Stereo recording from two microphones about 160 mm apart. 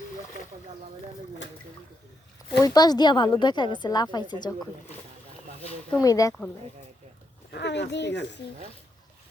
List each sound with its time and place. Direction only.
2.6 s a woman's voice: 25° left (ahead or behind)
6.0 s a woman's voice: 20° left (ahead or behind)
7.5 s speech: 90° left